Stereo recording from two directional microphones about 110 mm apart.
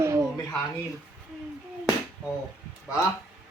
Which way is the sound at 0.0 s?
25° right (ahead or behind).